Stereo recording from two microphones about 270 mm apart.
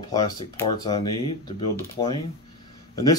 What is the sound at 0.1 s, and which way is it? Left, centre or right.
Speech, centre.